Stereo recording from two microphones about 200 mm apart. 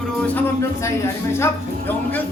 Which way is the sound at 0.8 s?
15° left (ahead or behind).